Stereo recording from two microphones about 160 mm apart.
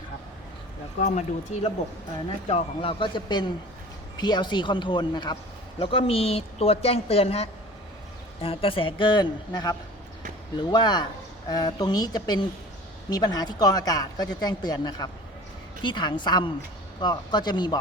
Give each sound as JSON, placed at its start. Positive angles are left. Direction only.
{"t": 1.1, "sound": "a woman's voice", "side_deg": 45}